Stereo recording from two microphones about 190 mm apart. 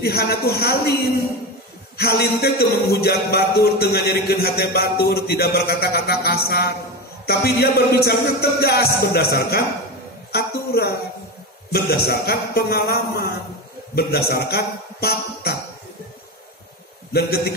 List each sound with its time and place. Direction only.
0.0 s a man's voice: 55° left (ahead or behind)
2.0 s a man's voice: 55° left (ahead or behind)
17.1 s a man's voice: 55° left (ahead or behind)